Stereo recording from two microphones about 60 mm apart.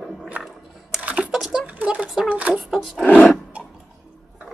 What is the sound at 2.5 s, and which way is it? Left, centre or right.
Speech, centre.